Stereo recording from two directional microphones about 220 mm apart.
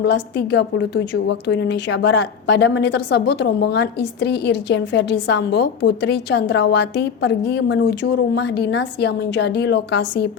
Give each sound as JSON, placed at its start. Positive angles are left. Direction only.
{"t": 0.0, "sound": "a woman's voice", "side_deg": 50}